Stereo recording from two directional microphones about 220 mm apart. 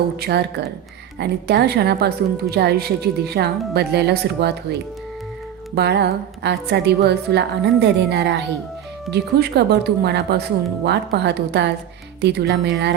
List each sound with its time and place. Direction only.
0.2 s a woman's voice: 50° right (ahead or behind)